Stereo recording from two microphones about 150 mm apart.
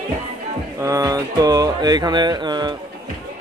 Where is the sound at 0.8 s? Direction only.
20° right (ahead or behind).